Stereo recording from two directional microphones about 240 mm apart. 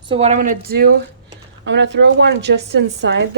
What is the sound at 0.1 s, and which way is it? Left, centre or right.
Speech, right.